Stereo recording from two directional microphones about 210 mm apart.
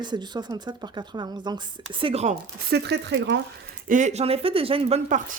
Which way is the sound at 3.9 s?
35° right (ahead or behind).